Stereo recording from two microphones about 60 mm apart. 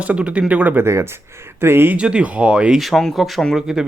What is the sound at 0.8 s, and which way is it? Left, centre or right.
Speech, right.